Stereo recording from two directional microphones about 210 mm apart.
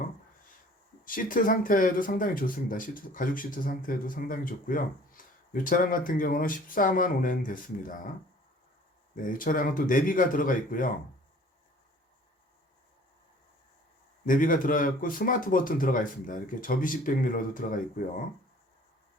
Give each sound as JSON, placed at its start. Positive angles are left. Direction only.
{"t": 1.0, "sound": "speech", "side_deg": 40}
{"t": 9.1, "sound": "speech", "side_deg": 40}
{"t": 14.3, "sound": "speech", "side_deg": 40}